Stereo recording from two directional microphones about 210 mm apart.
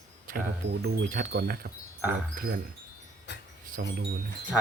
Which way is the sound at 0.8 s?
45° right (ahead or behind).